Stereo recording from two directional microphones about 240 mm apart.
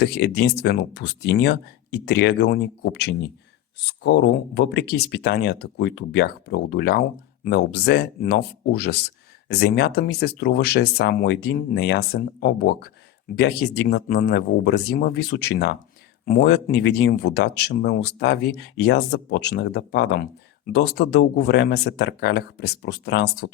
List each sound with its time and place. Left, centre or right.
0.0 s speech: left